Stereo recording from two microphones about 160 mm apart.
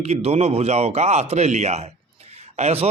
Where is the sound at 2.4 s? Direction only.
40° right (ahead or behind).